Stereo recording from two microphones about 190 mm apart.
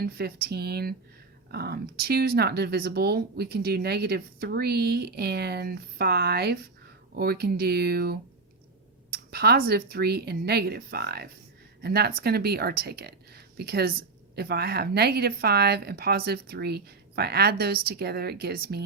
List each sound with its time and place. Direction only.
0.0 s speech: 55° right (ahead or behind)